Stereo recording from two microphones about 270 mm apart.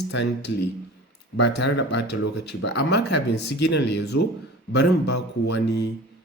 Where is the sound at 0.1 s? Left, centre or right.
Left.